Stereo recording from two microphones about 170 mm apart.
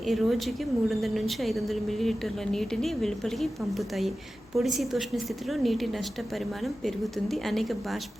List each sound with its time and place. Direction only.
0.0 s a woman's voice: centre (ahead or behind)